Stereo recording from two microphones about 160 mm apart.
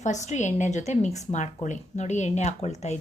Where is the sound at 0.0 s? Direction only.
50° left (ahead or behind).